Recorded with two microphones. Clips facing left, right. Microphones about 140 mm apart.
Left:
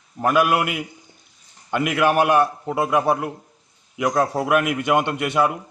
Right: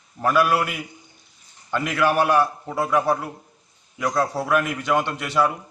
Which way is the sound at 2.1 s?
15° left (ahead or behind).